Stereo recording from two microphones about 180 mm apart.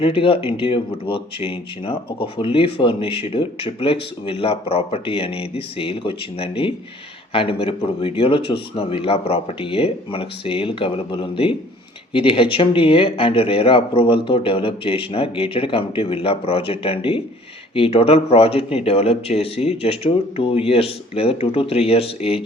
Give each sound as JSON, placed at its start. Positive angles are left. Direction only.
{"t": 0.0, "sound": "speech", "side_deg": 30}